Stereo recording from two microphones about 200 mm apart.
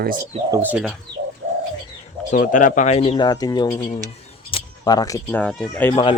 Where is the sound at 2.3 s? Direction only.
40° left (ahead or behind); by 5.9 s 5° left (ahead or behind).